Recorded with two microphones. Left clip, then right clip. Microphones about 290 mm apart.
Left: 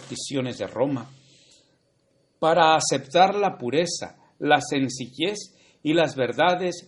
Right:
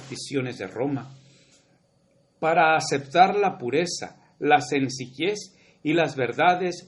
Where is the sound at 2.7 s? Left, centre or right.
Left.